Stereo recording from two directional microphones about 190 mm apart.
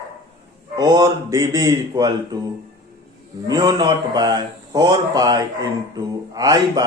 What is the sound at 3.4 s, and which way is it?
A man's voice, 20° right (ahead or behind).